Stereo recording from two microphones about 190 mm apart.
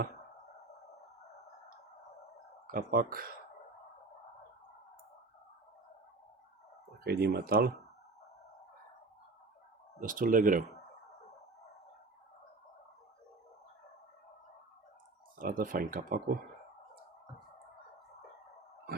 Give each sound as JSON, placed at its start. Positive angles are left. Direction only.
{"t": 2.6, "sound": "speech", "side_deg": -45}
{"t": 7.0, "sound": "speech", "side_deg": -55}
{"t": 10.0, "sound": "speech", "side_deg": -45}
{"t": 15.4, "sound": "speech", "side_deg": -45}